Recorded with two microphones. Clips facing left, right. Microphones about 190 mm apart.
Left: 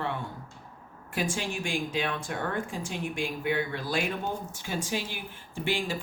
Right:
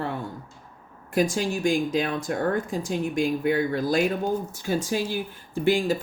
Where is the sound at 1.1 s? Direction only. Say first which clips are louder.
Right 8 dB; 40° right (ahead or behind).